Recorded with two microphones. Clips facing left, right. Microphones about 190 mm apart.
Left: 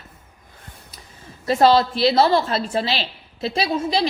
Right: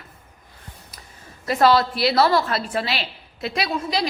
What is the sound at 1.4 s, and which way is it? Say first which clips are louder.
A woman's voice: left 2 dB; 25° left (ahead or behind).